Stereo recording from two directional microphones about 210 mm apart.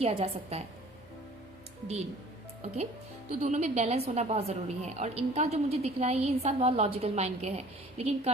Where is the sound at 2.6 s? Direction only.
30° right (ahead or behind).